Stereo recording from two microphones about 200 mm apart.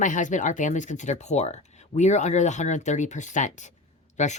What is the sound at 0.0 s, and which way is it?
Speech, 40° left (ahead or behind).